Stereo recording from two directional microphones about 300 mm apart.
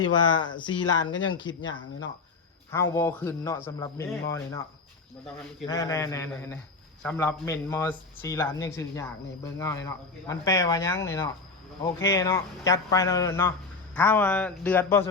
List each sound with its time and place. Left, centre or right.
0.3 s speech: centre
0.9 s speech: left
2.7 s speech: centre
5.6 s speech: centre